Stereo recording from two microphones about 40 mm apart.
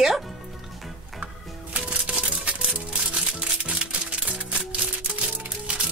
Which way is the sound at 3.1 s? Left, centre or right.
Right.